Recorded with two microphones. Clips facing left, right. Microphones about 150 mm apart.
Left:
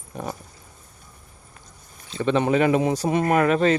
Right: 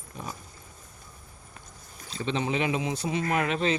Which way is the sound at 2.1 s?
55° left (ahead or behind).